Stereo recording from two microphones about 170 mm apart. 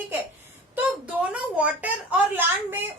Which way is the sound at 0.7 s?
10° right (ahead or behind).